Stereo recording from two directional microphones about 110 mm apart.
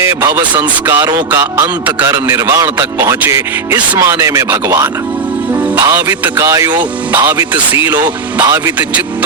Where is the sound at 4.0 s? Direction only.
30° right (ahead or behind).